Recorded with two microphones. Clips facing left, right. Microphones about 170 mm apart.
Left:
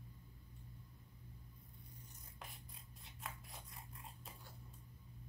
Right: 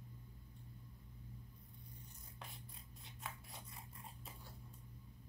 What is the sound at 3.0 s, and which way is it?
Scissors, centre (ahead or behind).